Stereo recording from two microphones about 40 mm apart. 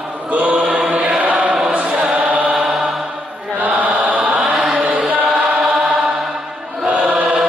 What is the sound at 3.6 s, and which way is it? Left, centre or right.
Chant, right.